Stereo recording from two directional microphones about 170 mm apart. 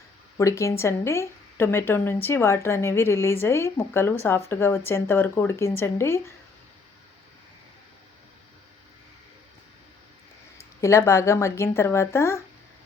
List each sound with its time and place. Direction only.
0.3 s a woman's voice: 15° left (ahead or behind)
10.8 s a woman's voice: 15° left (ahead or behind)